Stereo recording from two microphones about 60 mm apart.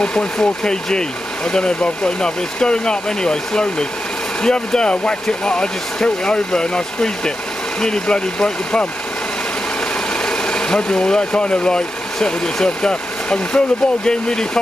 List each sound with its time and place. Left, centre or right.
0.0 s speech: centre
10.2 s speech: centre